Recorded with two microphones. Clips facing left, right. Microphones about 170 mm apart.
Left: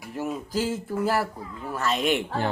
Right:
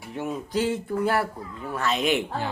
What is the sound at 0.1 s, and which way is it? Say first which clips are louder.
Speech: right 1 dB; centre (ahead or behind).